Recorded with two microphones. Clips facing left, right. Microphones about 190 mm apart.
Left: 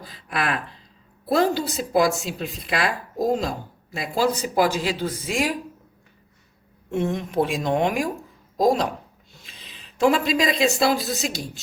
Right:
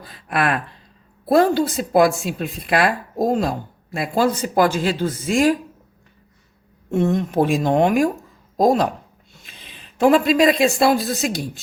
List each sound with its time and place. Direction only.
0.1 s a woman's voice: 55° right (ahead or behind)
6.9 s a woman's voice: 40° right (ahead or behind)